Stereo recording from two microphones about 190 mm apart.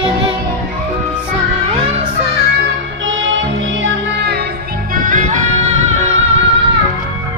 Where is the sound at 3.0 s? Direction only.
80° right; by 4.5 s 60° right (ahead or behind).